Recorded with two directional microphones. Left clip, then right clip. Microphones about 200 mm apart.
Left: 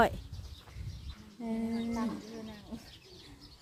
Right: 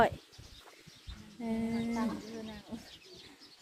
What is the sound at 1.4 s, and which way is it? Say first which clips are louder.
Speech: even; 5° left (ahead or behind).